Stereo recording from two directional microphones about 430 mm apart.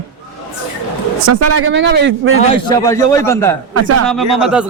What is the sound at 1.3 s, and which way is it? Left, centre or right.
A man's voice, right.